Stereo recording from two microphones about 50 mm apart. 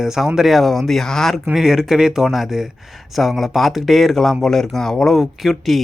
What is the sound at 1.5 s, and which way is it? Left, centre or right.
Speech, centre.